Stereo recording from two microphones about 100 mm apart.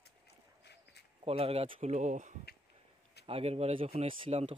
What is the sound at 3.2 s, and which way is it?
Speech, 80° right.